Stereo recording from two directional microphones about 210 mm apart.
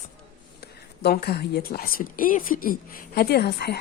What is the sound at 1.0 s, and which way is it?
A woman's voice, 50° left (ahead or behind).